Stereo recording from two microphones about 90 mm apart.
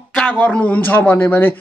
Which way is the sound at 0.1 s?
10° left (ahead or behind).